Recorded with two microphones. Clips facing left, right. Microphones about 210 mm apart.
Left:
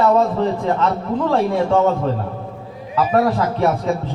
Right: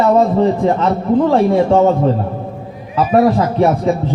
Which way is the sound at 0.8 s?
30° right (ahead or behind).